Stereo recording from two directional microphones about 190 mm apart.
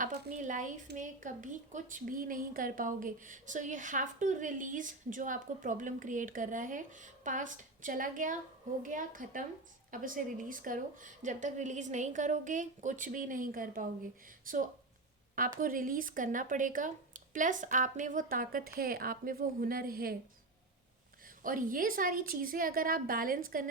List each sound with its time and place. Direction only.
0.3 s a woman's voice: 40° right (ahead or behind)
21.4 s speech: 45° right (ahead or behind)